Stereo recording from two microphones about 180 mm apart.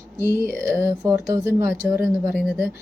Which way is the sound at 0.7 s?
15° right (ahead or behind).